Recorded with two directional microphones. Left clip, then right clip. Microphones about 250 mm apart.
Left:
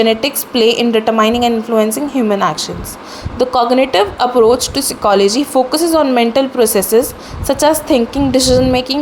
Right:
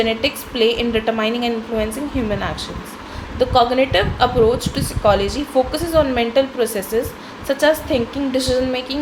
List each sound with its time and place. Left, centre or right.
0.0 s speech: left